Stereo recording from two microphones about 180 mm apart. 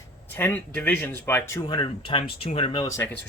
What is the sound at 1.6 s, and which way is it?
Speech, 25° left (ahead or behind).